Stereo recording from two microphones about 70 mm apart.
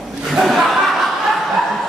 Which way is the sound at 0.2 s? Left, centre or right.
Centre.